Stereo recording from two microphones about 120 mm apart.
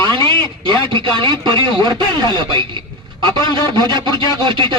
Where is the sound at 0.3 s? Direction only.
40° right (ahead or behind).